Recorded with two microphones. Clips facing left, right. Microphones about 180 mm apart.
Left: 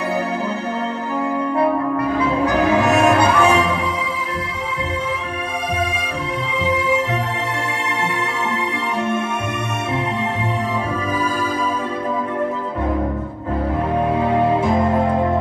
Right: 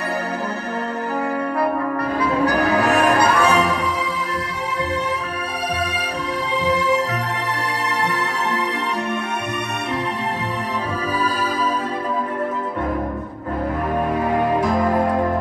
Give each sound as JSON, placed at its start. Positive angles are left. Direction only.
{"t": 2.1, "sound": "music", "side_deg": 25}
{"t": 14.1, "sound": "music", "side_deg": 25}
{"t": 15.0, "sound": "music", "side_deg": 0}